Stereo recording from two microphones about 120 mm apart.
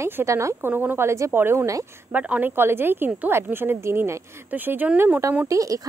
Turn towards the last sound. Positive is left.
turn(degrees=-30)  # may be behind; listen again after turning